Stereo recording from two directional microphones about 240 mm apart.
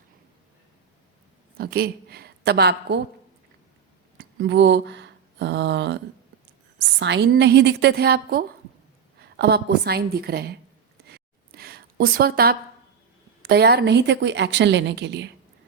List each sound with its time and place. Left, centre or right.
1.5 s a woman's voice: right
4.2 s a woman's voice: right
11.1 s a sound: right
13.5 s a woman's voice: right